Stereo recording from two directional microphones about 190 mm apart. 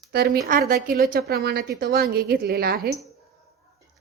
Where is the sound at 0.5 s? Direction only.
45° right (ahead or behind).